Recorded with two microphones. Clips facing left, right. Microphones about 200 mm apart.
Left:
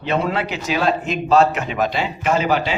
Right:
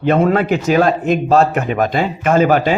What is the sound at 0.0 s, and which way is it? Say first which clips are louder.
Speech: right 7 dB; 50° right (ahead or behind).